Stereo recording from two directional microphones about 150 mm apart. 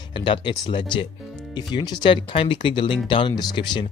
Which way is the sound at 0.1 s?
30° left (ahead or behind).